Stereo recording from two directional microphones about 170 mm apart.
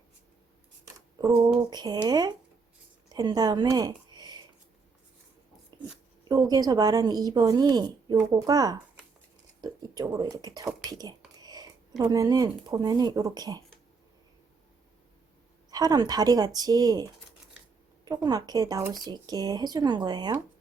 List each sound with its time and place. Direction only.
1.7 s speech: 25° right (ahead or behind)
5.7 s a sound: 25° right (ahead or behind)
6.2 s speech: 20° right (ahead or behind)
15.7 s speech: 25° right (ahead or behind)
18.3 s speech: 20° right (ahead or behind)